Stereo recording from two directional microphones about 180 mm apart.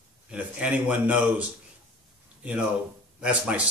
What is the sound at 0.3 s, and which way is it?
Speech, 5° right (ahead or behind).